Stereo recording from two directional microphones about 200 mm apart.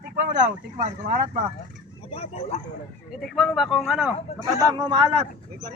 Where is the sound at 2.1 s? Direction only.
30° left (ahead or behind).